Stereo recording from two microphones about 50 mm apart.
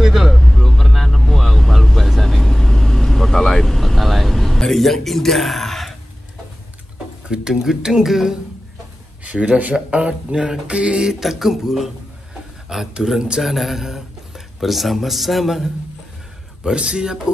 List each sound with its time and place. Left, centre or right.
0.0 s vehicle: centre
4.6 s a man's voice: centre
7.2 s speech: centre
9.2 s speech: right
13.4 s speech: centre
16.6 s speech: centre